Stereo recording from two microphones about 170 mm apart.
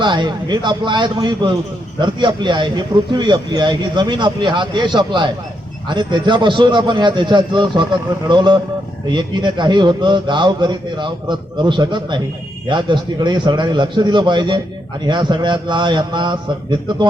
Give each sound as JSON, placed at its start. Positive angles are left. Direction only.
{"t": 0.0, "sound": "a man's voice", "side_deg": -25}